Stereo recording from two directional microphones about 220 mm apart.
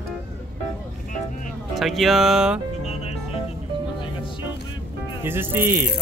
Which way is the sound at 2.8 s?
30° left (ahead or behind).